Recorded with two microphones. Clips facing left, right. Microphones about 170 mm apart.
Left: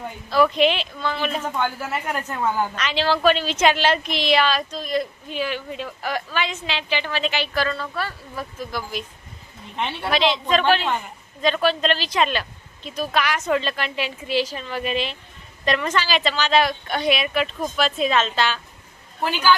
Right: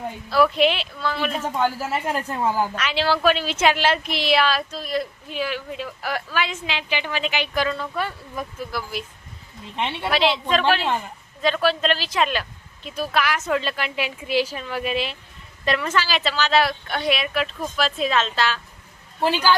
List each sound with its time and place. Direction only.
0.3 s speech: 5° right (ahead or behind)
1.5 s speech: 30° right (ahead or behind)
2.5 s speech: 5° right (ahead or behind)
9.7 s speech: 25° right (ahead or behind)
10.0 s speech: 5° right (ahead or behind)
19.2 s a woman's voice: 35° right (ahead or behind)